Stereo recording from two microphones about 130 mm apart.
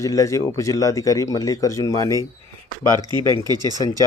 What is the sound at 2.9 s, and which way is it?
Speech, 30° right (ahead or behind).